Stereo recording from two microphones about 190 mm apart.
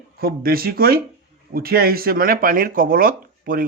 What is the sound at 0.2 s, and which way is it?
A man's voice, 50° right (ahead or behind).